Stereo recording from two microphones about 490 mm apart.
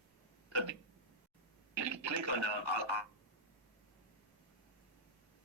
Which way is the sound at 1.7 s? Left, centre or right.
Right.